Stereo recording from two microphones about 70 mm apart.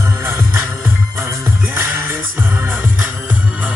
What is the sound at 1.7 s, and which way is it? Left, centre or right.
Music, right.